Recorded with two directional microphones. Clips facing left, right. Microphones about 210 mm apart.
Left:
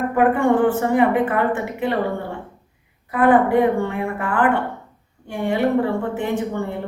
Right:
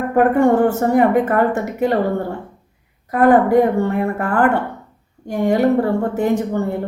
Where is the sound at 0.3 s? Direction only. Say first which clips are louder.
Right 3 dB; 40° right (ahead or behind).